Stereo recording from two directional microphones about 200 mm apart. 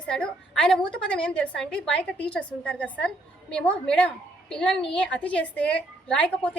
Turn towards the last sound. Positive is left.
turn(degrees=5)  # may be behind; listen again after turning